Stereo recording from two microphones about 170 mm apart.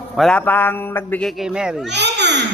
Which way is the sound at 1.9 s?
90° right.